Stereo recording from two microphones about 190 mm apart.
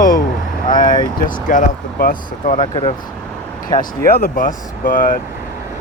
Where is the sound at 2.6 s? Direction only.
25° left (ahead or behind).